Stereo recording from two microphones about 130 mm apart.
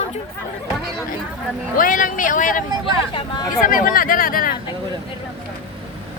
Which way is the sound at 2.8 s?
40° left (ahead or behind).